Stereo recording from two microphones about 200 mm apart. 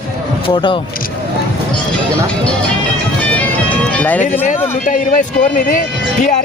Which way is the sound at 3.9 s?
10° left (ahead or behind).